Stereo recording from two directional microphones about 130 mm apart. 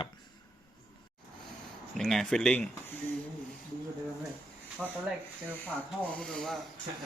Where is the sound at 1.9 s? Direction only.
5° left (ahead or behind).